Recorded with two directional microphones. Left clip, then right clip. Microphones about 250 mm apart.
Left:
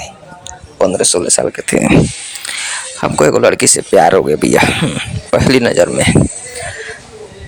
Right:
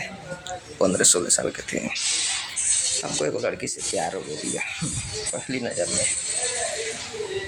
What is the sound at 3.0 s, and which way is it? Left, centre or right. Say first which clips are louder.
Speech: left 16 dB; left.